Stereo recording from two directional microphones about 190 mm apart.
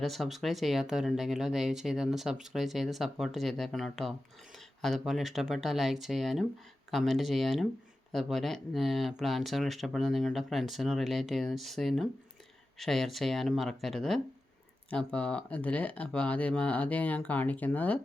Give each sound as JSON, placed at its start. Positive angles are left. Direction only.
{"t": 0.0, "sound": "speech", "side_deg": 0}